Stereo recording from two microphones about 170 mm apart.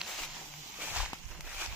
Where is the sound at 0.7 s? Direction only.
5° right (ahead or behind).